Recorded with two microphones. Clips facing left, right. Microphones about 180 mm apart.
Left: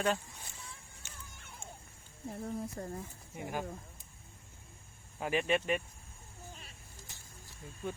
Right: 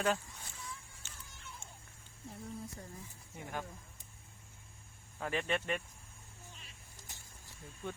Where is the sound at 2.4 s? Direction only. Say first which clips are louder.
Left 7 dB; 60° left (ahead or behind).